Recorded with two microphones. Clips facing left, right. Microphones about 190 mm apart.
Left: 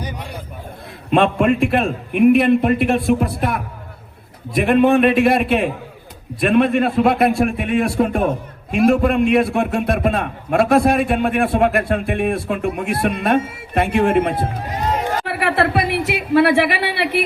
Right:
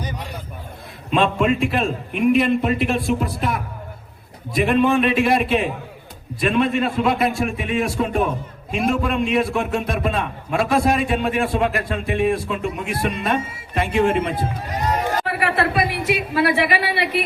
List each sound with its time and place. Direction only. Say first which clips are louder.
1.1 s a man's voice: left 3 dB; 55° left (ahead or behind)
15.4 s a woman's voice: left 4 dB; 65° left (ahead or behind)